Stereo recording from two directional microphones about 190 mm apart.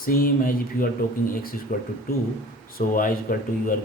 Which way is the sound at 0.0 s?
50° left (ahead or behind).